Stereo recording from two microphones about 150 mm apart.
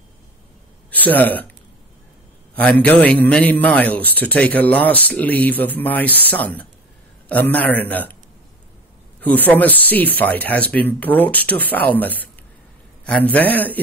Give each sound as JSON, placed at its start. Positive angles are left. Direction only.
{"t": 0.9, "sound": "speech", "side_deg": 10}
{"t": 2.5, "sound": "a man's voice", "side_deg": 10}
{"t": 9.2, "sound": "a man's voice", "side_deg": 10}